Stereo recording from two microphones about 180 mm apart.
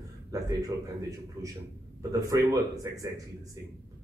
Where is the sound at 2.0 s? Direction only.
20° right (ahead or behind).